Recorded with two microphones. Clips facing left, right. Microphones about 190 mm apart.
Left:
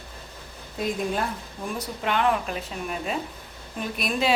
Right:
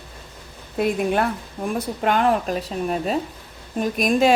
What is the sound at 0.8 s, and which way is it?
Speech, 65° right (ahead or behind).